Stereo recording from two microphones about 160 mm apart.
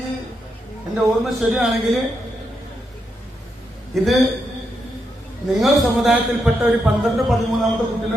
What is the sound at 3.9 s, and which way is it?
Speech, centre (ahead or behind).